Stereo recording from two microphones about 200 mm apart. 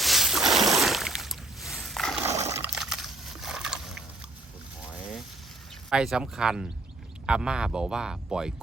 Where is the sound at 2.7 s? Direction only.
Centre (ahead or behind).